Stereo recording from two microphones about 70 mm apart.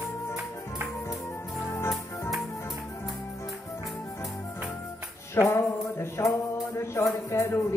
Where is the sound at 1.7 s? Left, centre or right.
Left.